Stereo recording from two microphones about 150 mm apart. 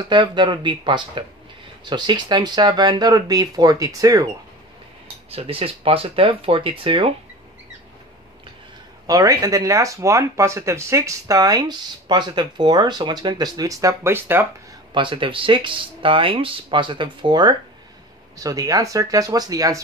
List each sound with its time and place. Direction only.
0.0 s speech: 30° right (ahead or behind)
5.3 s speech: 40° right (ahead or behind)
9.0 s speech: 25° right (ahead or behind)
15.0 s speech: 35° right (ahead or behind)